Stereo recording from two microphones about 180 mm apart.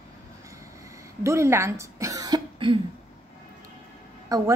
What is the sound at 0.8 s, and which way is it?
Throat clearing, 15° right (ahead or behind).